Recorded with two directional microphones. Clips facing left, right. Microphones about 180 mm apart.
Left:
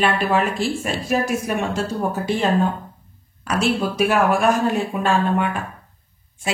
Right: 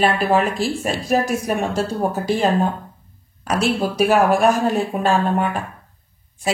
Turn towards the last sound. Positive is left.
turn(degrees=-40)  # may be behind; listen again after turning